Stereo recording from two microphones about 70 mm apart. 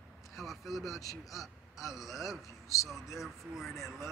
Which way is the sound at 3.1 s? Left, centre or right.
Centre.